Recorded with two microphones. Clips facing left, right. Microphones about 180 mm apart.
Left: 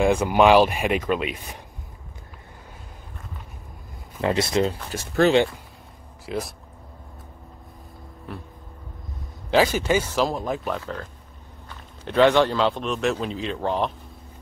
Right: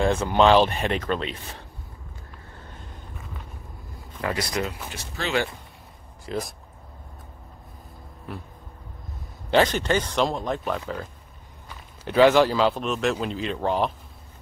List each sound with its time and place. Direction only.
0.0 s speech: 10° left (ahead or behind)
4.2 s speech: 25° left (ahead or behind)
4.9 s speech: 45° left (ahead or behind)
6.2 s speech: centre (ahead or behind)
8.3 s speech: centre (ahead or behind)
9.5 s speech: 5° left (ahead or behind)